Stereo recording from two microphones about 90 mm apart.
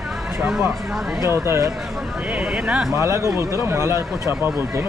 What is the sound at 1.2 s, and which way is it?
Speech, 30° right (ahead or behind).